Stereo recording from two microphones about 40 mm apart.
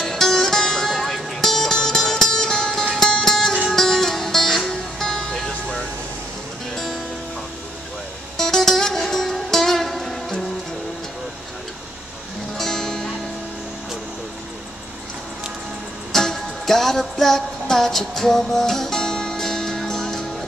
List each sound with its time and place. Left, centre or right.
0.0 s music: centre
8.4 s music: centre
12.5 s music: centre
16.1 s music: centre